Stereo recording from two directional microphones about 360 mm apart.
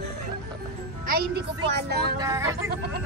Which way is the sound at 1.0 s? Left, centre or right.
Right.